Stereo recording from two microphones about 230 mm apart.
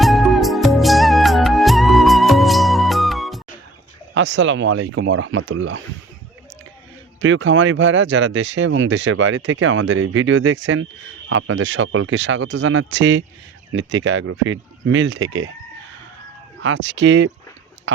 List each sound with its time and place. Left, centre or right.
0.0 s music: centre
4.1 s speech: right
7.2 s speech: right
16.6 s speech: right
17.9 s a sound: right